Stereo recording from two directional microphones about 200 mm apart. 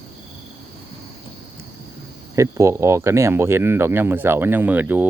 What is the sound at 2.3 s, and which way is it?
Speech, 15° right (ahead or behind).